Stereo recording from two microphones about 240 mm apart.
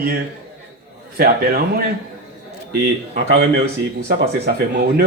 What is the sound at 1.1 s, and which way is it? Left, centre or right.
Speech, right.